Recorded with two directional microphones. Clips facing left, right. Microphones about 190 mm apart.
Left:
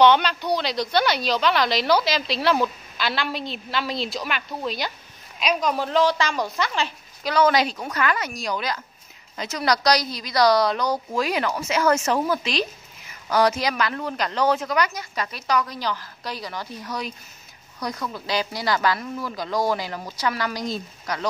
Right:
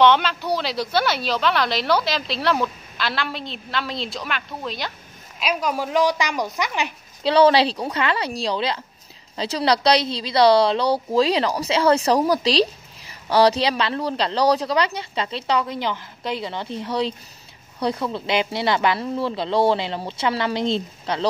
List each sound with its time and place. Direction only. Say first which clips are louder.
0.0 s a woman's voice: even; centre (ahead or behind); by 6.9 s 15° right (ahead or behind)
7.2 s a woman's voice: right 4 dB; 30° right (ahead or behind)